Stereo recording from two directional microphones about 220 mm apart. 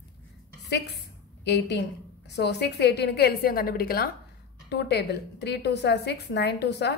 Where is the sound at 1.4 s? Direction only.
50° left (ahead or behind).